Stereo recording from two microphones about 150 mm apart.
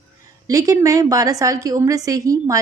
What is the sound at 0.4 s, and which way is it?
A woman's voice, 25° right (ahead or behind).